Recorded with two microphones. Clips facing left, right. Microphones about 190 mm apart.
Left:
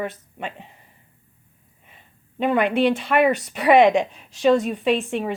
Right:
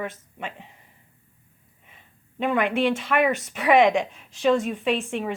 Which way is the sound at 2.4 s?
35° left (ahead or behind).